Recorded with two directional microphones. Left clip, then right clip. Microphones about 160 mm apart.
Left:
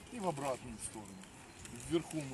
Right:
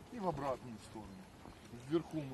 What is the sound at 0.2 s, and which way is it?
Speech, 15° left (ahead or behind).